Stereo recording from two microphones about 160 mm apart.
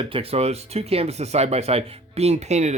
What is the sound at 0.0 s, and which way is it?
Speech, 35° right (ahead or behind).